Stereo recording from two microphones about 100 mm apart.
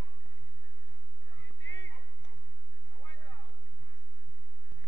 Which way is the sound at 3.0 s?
50° left (ahead or behind).